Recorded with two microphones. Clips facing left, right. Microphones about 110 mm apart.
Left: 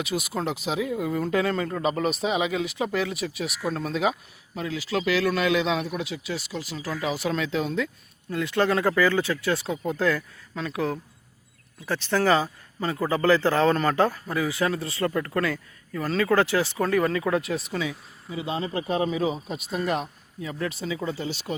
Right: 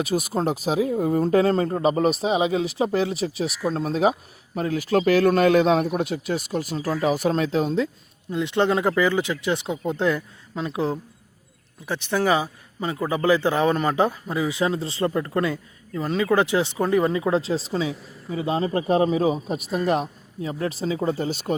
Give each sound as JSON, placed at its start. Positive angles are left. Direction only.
{"t": 0.0, "sound": "speech", "side_deg": -40}
{"t": 8.3, "sound": "speech", "side_deg": -20}
{"t": 11.9, "sound": "speech", "side_deg": -15}